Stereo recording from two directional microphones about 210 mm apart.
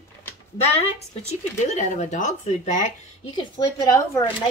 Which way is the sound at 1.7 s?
35° left (ahead or behind).